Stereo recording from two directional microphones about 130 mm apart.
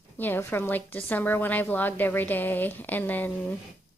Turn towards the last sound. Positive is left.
turn(degrees=15)  # may be behind; listen again after turning